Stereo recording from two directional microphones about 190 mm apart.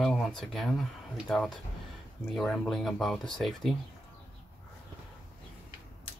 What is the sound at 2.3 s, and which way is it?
Speech, 5° left (ahead or behind).